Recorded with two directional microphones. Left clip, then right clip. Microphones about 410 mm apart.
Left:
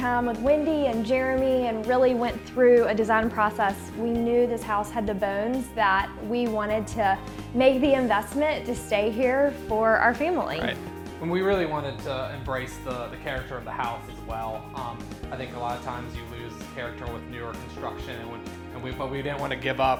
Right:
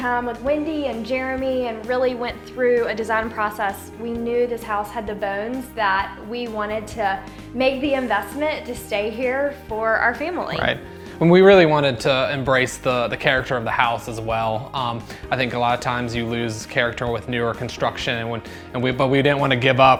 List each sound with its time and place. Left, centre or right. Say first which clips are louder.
0.0 s speech: right 2 dB; left
11.2 s speech: right 13 dB; right